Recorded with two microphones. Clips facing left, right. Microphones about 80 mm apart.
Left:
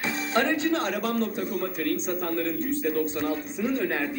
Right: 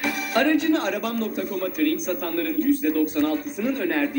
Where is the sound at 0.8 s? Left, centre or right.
Left.